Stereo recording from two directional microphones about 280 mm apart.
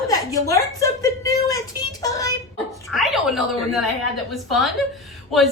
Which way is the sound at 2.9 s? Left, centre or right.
Centre.